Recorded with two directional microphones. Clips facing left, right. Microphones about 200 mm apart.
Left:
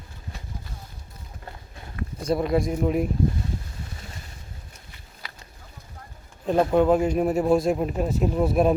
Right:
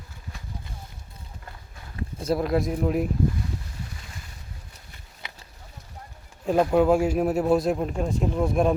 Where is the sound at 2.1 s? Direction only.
Centre (ahead or behind).